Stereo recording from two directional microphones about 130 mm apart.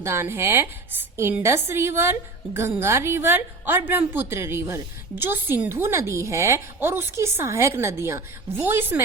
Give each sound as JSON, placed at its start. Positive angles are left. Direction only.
{"t": 0.0, "sound": "a woman's voice", "side_deg": -20}